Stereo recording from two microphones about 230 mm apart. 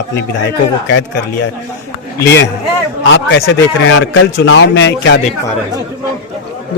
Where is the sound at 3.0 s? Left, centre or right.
Left.